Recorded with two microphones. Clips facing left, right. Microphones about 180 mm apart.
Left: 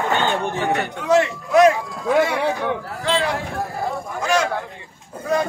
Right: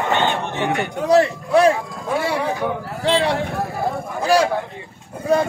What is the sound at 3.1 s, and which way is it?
A man's voice, 30° right (ahead or behind).